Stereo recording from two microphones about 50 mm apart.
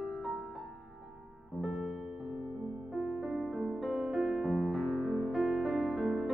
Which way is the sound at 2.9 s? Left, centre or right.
Centre.